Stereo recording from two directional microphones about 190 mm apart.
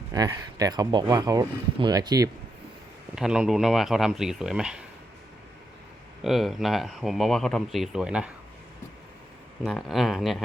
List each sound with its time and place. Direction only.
0.1 s speech: 20° right (ahead or behind)
3.2 s speech: 5° right (ahead or behind)
6.2 s speech: centre (ahead or behind)
9.6 s speech: centre (ahead or behind)